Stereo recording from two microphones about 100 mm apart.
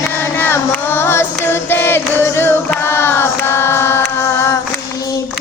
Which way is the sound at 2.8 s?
25° left (ahead or behind).